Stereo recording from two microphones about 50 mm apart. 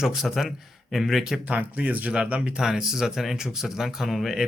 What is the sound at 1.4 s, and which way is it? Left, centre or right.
Speech, right.